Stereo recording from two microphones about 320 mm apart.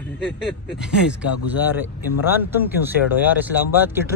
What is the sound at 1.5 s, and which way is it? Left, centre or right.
A man's voice, centre.